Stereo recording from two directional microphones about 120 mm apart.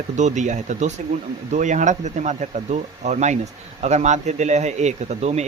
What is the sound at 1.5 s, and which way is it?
Speech, 90° right.